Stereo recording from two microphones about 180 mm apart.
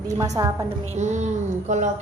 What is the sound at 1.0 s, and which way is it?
Speech, 40° right (ahead or behind).